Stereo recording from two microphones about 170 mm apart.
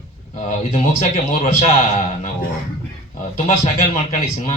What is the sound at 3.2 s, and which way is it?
Speech, 50° left (ahead or behind).